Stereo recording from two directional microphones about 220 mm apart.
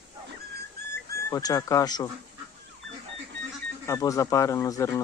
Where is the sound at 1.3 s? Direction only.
15° left (ahead or behind).